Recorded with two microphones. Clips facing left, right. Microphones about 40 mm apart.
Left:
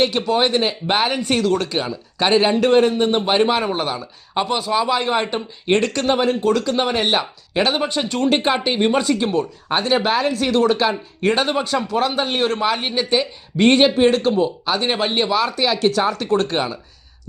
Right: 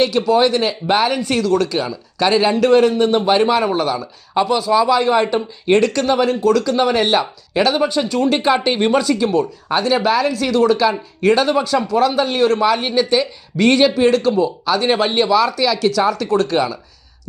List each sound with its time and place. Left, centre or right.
0.0 s speech: left